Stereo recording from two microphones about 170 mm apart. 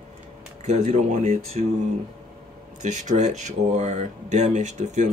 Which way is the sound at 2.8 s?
45° right (ahead or behind).